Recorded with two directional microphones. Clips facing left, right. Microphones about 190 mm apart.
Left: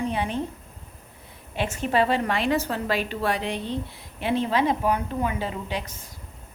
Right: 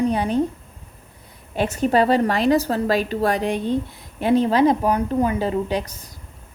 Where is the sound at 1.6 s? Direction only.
40° right (ahead or behind).